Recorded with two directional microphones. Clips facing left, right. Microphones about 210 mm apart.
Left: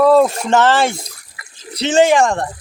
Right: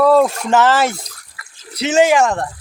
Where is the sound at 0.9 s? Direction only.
10° left (ahead or behind).